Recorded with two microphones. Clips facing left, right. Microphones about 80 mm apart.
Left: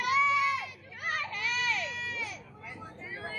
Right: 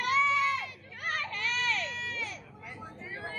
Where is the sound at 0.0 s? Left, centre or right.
Centre.